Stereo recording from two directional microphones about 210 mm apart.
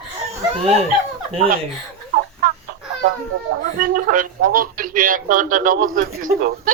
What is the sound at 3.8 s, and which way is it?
Speech, 40° right (ahead or behind).